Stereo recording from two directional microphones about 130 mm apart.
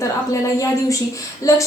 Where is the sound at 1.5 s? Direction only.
25° left (ahead or behind).